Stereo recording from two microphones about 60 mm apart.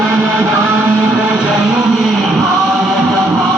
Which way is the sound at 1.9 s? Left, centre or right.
Centre.